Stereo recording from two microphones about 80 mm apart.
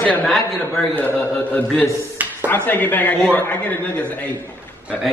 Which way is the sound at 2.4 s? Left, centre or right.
Left.